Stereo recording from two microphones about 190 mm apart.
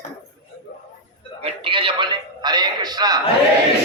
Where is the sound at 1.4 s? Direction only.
25° right (ahead or behind).